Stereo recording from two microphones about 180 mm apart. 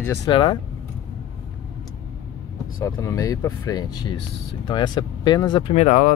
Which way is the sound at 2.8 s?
15° left (ahead or behind).